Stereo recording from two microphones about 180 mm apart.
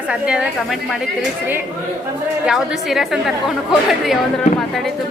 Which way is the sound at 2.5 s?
Centre (ahead or behind).